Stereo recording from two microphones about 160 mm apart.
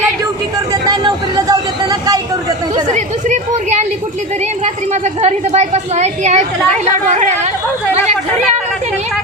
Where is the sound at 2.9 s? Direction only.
50° right (ahead or behind).